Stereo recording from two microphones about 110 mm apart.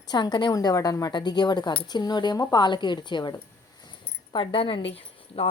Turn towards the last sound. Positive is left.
turn(degrees=60)  # may be behind; listen again after turning